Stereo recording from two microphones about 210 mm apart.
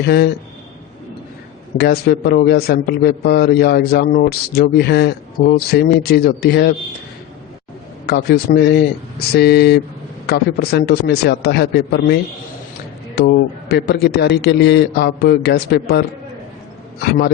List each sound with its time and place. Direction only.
0.0 s a man's voice: 50° left (ahead or behind)
1.8 s a man's voice: 50° left (ahead or behind)
8.0 s a man's voice: 50° left (ahead or behind)